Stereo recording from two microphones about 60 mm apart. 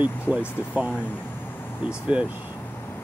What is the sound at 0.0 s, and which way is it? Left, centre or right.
Speech, right.